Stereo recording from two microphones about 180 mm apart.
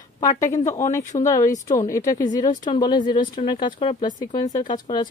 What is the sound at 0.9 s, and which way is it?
Speech, 15° left (ahead or behind).